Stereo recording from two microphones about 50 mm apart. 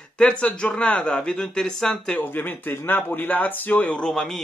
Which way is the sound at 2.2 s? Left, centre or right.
Left.